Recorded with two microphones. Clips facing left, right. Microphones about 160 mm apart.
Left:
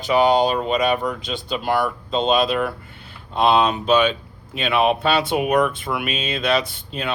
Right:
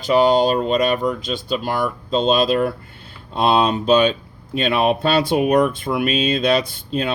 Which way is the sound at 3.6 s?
35° right (ahead or behind).